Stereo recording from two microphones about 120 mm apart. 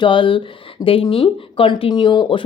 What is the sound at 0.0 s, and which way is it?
Speech, 45° left (ahead or behind).